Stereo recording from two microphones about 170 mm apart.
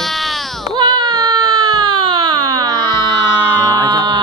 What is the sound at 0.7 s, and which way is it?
Baby cry, 25° right (ahead or behind).